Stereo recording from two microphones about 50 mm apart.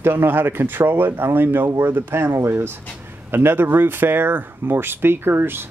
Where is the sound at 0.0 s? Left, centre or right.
Right.